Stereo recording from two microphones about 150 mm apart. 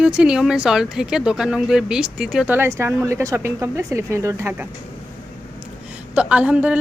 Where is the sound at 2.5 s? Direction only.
15° right (ahead or behind).